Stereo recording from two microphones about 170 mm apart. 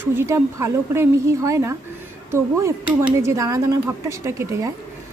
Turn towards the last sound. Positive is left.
turn(degrees=-15)  # may be behind; listen again after turning